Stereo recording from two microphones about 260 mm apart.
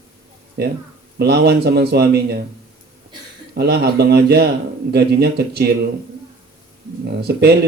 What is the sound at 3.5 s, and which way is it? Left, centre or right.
Speech, right.